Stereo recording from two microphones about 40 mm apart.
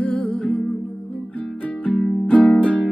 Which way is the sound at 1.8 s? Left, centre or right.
Left.